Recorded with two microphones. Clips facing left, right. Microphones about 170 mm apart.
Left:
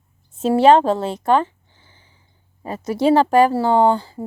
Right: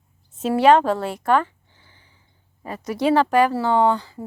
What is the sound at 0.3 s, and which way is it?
A woman's voice, 30° left (ahead or behind).